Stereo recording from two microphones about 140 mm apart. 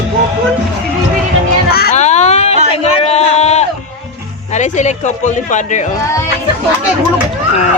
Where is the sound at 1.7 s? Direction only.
90° left.